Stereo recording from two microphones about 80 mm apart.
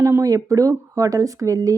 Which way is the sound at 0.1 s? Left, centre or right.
Right.